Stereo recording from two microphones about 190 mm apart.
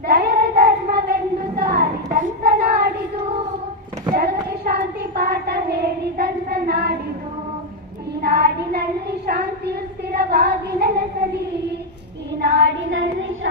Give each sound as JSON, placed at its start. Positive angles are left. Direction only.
{"t": 0.1, "sound": "child singing", "side_deg": -55}
{"t": 4.1, "sound": "child singing", "side_deg": -55}
{"t": 8.2, "sound": "child singing", "side_deg": -55}
{"t": 12.4, "sound": "child singing", "side_deg": -80}